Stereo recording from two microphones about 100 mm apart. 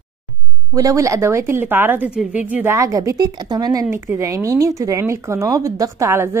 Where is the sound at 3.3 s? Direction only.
45° right (ahead or behind).